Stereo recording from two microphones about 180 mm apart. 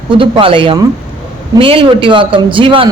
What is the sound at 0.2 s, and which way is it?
A woman's voice, 30° right (ahead or behind).